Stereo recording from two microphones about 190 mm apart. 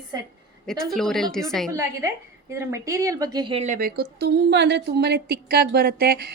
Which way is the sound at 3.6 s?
45° right (ahead or behind).